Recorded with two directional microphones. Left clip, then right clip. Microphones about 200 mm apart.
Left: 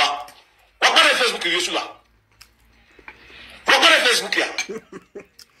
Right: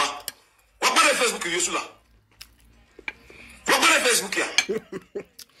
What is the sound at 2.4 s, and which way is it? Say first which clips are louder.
Music: right 3 dB; 45° right (ahead or behind).